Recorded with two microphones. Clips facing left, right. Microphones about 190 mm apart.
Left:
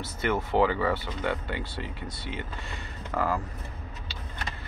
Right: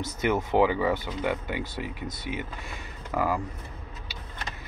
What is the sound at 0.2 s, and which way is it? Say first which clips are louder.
Speech: right 2 dB; 15° right (ahead or behind).